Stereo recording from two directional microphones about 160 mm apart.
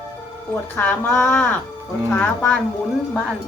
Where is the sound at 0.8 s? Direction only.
10° left (ahead or behind).